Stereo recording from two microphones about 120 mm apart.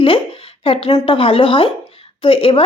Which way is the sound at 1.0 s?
50° left (ahead or behind).